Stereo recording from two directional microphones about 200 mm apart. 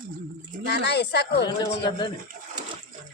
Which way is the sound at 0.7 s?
55° left (ahead or behind).